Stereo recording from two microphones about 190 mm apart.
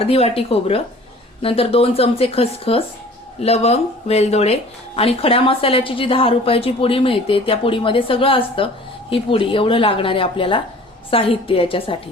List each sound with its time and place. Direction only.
0.0 s a woman's voice: 30° left (ahead or behind)